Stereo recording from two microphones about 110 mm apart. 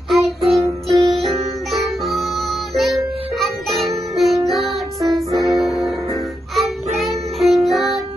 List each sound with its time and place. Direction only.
0.1 s music: centre (ahead or behind)
5.1 s music: 35° right (ahead or behind)
5.6 s music: centre (ahead or behind)